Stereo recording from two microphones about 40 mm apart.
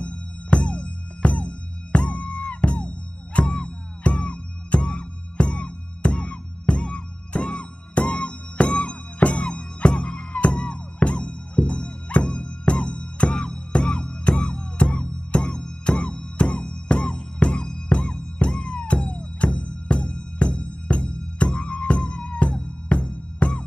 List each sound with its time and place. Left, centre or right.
0.0 s music: left